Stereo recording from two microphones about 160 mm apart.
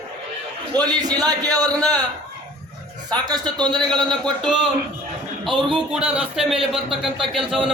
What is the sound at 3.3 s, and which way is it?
Speech, 25° right (ahead or behind).